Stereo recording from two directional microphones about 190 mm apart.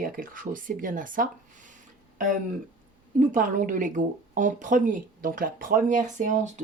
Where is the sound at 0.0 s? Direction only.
45° right (ahead or behind).